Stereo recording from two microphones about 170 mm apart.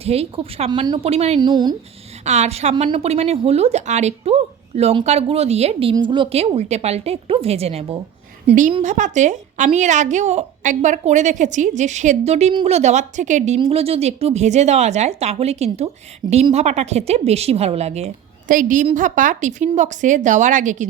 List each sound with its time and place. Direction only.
0.0 s speech: 35° right (ahead or behind)
1.4 s speech: 25° right (ahead or behind)
2.2 s speech: 40° right (ahead or behind)